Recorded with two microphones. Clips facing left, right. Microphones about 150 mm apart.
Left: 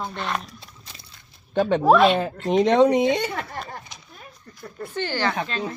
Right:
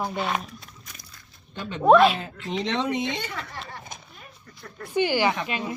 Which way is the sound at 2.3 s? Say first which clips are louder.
Left 9 dB; 45° left (ahead or behind).